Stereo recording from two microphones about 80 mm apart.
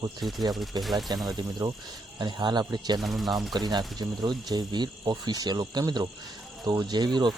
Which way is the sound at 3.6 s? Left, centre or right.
Right.